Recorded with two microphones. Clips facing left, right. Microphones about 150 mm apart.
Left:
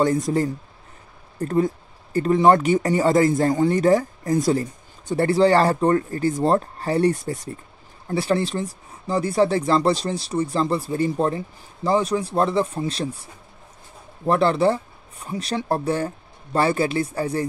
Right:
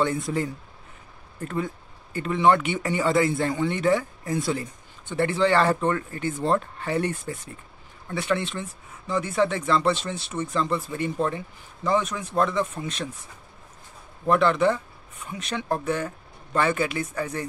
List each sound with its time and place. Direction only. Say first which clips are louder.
0.0 s speech: left 5 dB; 40° left (ahead or behind)